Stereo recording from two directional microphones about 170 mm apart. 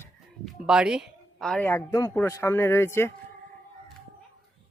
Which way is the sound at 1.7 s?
15° left (ahead or behind).